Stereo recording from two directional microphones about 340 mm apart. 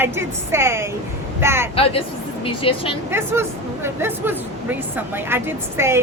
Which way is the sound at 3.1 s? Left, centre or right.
Centre.